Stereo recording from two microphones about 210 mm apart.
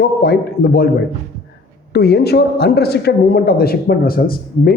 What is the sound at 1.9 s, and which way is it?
A man's voice, 50° left (ahead or behind).